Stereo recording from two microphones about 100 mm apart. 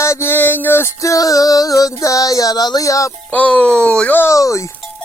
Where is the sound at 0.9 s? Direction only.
35° left (ahead or behind).